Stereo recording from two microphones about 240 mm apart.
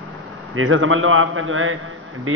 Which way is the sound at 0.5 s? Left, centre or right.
Right.